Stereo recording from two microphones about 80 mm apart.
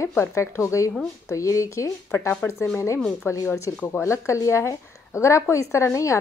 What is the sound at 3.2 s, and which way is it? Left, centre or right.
A woman's voice, left.